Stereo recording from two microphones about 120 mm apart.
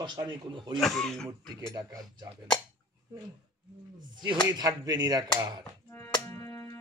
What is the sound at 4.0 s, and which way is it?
Speech, 40° right (ahead or behind).